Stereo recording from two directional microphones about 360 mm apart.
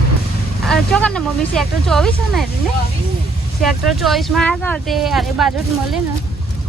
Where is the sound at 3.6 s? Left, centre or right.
Centre.